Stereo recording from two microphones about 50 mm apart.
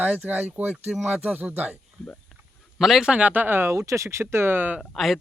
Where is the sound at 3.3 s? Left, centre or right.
Right.